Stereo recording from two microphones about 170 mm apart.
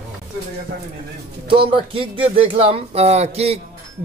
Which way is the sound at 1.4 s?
30° right (ahead or behind).